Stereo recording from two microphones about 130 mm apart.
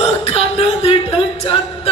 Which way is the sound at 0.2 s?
50° left (ahead or behind).